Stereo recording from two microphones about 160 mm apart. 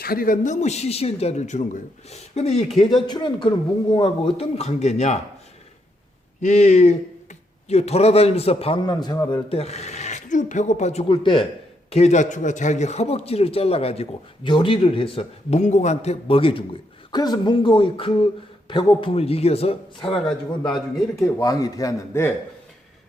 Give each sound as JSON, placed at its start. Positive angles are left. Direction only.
{"t": 0.0, "sound": "speech", "side_deg": 65}
{"t": 3.1, "sound": "a man's voice", "side_deg": 30}
{"t": 6.4, "sound": "speech", "side_deg": 50}
{"t": 11.1, "sound": "a man's voice", "side_deg": 30}
{"t": 11.9, "sound": "a man's voice", "side_deg": 40}
{"t": 20.7, "sound": "a man's voice", "side_deg": 0}
{"t": 21.3, "sound": "a man's voice", "side_deg": 20}